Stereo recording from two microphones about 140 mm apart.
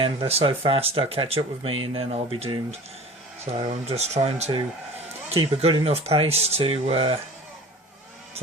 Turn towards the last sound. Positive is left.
turn(degrees=-40)  # may be behind; listen again after turning